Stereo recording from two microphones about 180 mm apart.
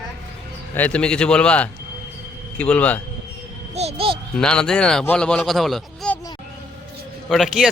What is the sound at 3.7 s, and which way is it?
Speech, 35° right (ahead or behind).